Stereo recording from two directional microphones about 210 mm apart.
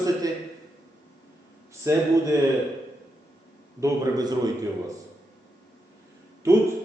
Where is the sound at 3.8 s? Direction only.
20° right (ahead or behind).